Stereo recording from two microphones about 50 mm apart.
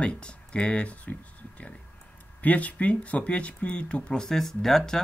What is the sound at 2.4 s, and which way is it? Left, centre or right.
Speech, left.